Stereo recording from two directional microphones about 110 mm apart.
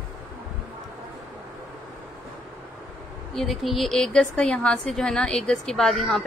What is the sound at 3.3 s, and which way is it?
A woman's voice, centre (ahead or behind).